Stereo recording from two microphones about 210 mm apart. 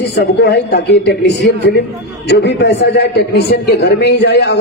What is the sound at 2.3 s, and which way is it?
A man's voice, 55° left (ahead or behind).